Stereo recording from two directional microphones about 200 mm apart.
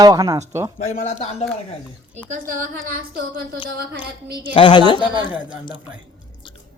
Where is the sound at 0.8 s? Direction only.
35° left (ahead or behind).